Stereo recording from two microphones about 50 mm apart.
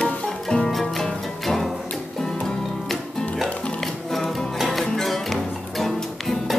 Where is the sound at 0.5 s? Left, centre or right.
Centre.